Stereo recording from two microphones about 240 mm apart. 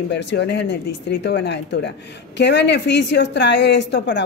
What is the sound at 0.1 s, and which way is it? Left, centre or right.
A woman's voice, left.